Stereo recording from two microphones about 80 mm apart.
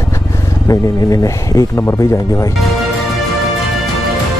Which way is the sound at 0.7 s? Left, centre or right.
Left.